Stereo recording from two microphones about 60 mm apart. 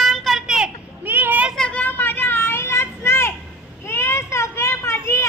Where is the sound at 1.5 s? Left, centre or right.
Left.